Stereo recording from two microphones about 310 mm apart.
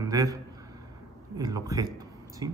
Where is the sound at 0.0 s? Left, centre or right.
Centre.